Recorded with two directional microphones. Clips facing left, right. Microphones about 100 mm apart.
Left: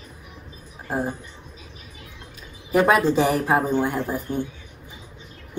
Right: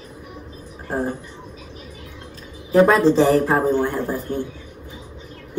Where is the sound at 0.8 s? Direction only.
10° left (ahead or behind).